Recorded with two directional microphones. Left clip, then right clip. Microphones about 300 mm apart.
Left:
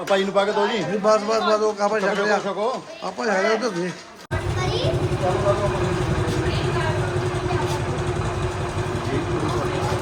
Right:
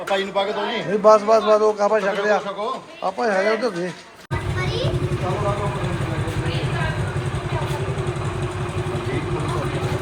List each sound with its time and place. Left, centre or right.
0.1 s speech: left
1.0 s a man's voice: centre